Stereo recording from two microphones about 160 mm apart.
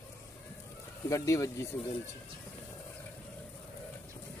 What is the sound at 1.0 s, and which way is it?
Speech, 20° left (ahead or behind).